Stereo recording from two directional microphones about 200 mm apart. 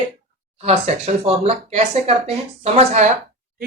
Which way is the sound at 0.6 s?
30° right (ahead or behind).